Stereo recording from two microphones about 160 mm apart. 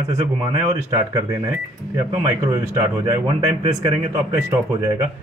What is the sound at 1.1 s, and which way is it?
Speech, 20° right (ahead or behind).